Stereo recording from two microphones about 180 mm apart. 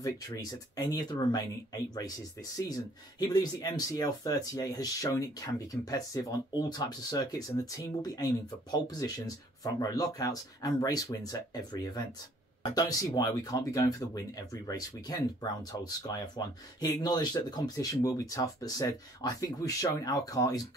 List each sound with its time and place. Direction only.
0.0 s speech: 20° left (ahead or behind)